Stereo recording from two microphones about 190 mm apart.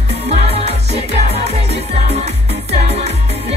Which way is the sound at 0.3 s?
35° right (ahead or behind).